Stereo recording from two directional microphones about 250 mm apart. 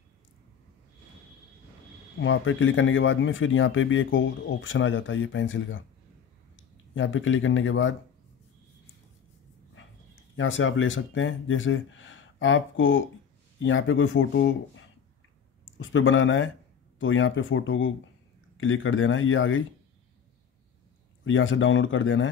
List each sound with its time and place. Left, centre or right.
2.1 s speech: left
10.3 s speech: left
15.8 s speech: left
21.2 s speech: left